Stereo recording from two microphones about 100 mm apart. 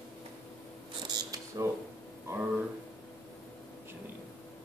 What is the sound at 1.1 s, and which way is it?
Mechanisms, 40° right (ahead or behind).